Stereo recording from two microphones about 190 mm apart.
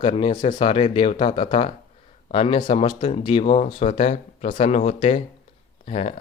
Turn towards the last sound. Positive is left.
turn(degrees=35)  # may be behind; listen again after turning